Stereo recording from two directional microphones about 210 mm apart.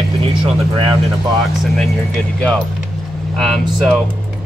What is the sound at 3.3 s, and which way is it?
Speech, centre (ahead or behind).